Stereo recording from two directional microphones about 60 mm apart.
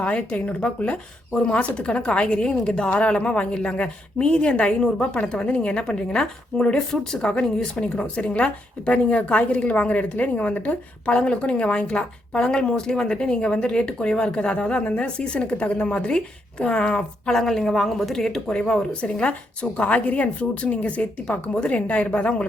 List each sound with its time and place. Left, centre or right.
0.0 s a woman's voice: centre